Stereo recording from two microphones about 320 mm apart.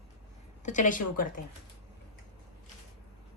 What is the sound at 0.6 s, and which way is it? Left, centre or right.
Speech, left.